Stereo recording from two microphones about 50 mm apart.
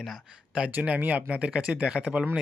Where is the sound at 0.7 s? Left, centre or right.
Right.